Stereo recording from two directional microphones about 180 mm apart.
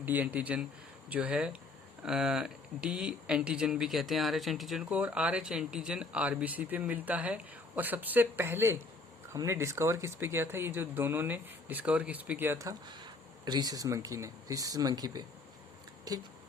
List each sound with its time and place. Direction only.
0.0 s speech: 10° right (ahead or behind)